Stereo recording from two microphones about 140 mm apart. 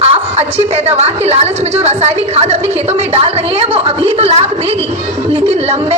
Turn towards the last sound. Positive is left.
turn(degrees=-50)  # may be behind; listen again after turning